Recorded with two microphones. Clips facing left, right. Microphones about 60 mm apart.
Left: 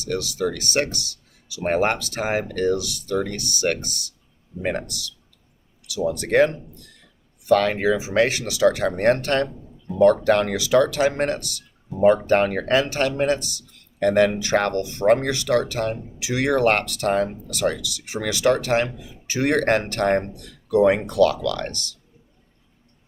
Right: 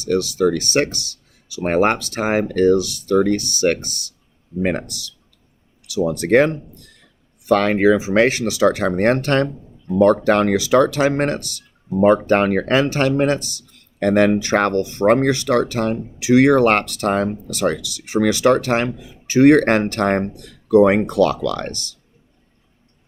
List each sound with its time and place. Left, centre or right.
0.0 s speech: right